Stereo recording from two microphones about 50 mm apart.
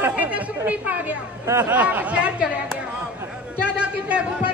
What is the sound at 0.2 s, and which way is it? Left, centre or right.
A woman's voice, right.